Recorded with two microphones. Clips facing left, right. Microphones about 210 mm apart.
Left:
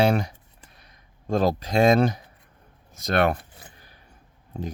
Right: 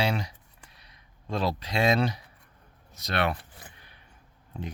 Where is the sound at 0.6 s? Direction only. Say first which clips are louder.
Left 3 dB; 50° left (ahead or behind).